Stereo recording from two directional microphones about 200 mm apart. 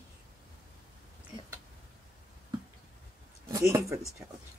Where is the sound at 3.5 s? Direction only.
15° right (ahead or behind).